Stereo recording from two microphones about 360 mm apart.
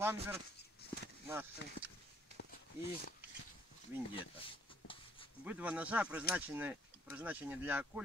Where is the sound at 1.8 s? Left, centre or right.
Left.